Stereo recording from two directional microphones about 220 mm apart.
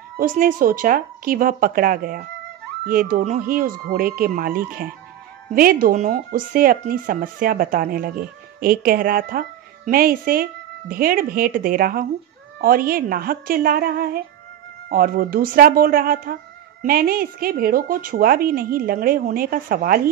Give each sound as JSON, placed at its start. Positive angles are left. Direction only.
{"t": 0.2, "sound": "speech", "side_deg": -40}